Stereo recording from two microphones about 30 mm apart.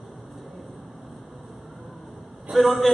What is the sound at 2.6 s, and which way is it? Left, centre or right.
Speech, centre.